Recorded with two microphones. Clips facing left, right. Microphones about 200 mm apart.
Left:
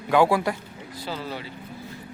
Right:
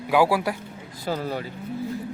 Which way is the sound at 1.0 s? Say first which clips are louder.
Right 6 dB; 45° right (ahead or behind).